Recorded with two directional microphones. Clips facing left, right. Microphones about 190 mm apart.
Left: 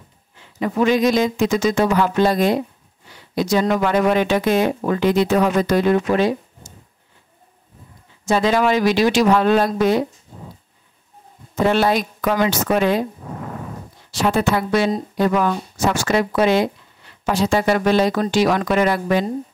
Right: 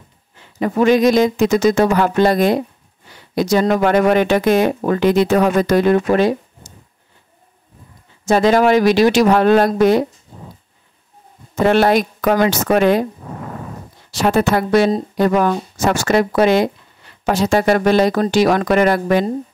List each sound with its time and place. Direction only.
0.6 s speech: 50° right (ahead or behind)
8.3 s speech: 45° right (ahead or behind)
11.6 s speech: 65° right (ahead or behind)
14.5 s speech: 45° right (ahead or behind)